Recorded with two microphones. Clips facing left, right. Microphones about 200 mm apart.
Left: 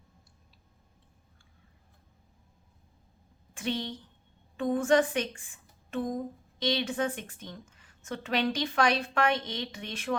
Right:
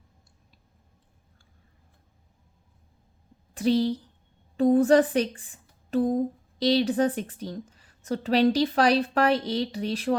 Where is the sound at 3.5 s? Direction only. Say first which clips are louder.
Right 11 dB; 35° right (ahead or behind).